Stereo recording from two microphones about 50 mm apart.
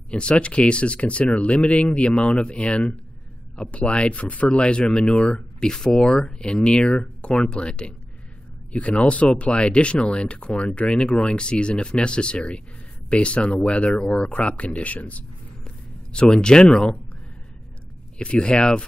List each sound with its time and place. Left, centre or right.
0.1 s speech: left
15.6 s a sound: centre
18.1 s speech: left